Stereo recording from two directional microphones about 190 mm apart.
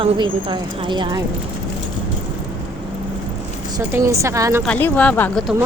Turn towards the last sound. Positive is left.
turn(degrees=5)  # may be behind; listen again after turning